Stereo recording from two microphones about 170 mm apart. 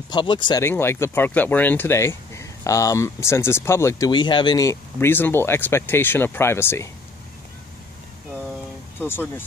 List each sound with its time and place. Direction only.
0.1 s speech: 25° left (ahead or behind)
0.7 s speech: 15° left (ahead or behind)
9.0 s speech: 15° left (ahead or behind)